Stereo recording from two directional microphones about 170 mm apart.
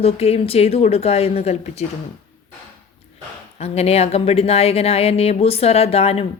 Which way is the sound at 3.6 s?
35° left (ahead or behind).